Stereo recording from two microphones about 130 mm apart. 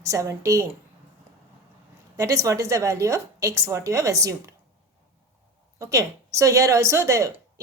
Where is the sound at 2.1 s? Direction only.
25° right (ahead or behind).